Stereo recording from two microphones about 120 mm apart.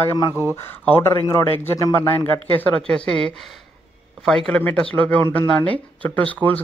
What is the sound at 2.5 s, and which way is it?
A woman's voice, 10° left (ahead or behind).